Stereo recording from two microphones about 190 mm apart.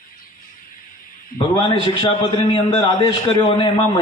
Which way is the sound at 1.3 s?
50° left (ahead or behind).